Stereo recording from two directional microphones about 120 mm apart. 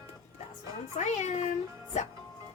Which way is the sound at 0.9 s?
75° left (ahead or behind).